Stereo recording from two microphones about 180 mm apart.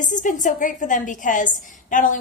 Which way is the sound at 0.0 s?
45° left (ahead or behind).